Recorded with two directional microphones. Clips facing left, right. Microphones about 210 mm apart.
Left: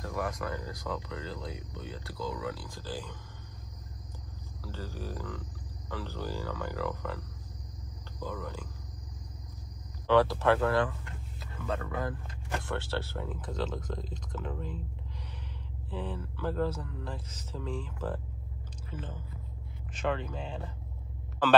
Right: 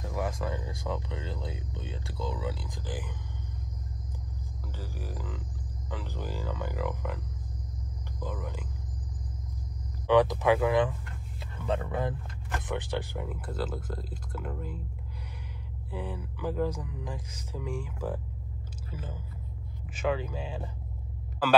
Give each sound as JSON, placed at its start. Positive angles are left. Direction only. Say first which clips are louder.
{"t": 0.0, "sound": "speech", "louder": "right 1 dB", "side_deg": -20}
{"t": 4.6, "sound": "speech", "louder": "left 2 dB", "side_deg": -15}
{"t": 10.0, "sound": "speech", "louder": "right 2 dB", "side_deg": -15}
{"t": 15.9, "sound": "speech", "louder": "even", "side_deg": -15}